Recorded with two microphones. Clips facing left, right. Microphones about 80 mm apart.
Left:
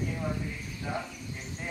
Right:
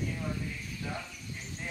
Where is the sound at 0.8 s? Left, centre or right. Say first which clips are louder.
Left 5 dB; centre.